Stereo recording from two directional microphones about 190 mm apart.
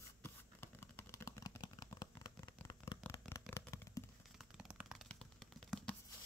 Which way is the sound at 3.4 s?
10° left (ahead or behind).